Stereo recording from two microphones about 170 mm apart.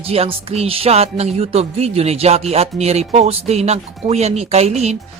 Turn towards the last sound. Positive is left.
turn(degrees=-40)  # may be behind; listen again after turning